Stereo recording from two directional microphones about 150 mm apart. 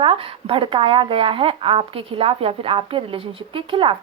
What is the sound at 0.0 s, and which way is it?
Speech, 35° right (ahead or behind).